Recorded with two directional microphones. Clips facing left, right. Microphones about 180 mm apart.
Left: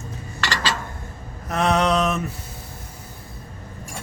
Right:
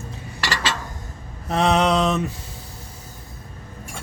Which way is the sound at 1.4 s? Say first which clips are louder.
Right 1 dB; 30° right (ahead or behind).